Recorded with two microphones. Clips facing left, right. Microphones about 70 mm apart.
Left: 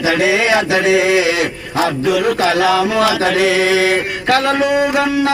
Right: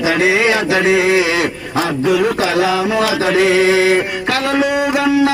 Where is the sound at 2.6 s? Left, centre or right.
Left.